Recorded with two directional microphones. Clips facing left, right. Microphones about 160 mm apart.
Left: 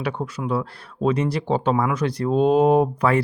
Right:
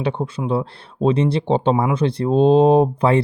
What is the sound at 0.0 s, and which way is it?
Speech, 25° right (ahead or behind).